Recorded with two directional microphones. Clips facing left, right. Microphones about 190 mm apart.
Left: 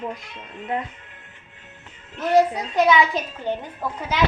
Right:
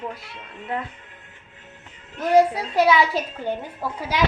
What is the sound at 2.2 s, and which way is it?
A woman's voice, 10° right (ahead or behind).